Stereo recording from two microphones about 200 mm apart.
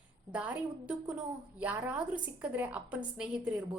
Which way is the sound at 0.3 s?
5° right (ahead or behind).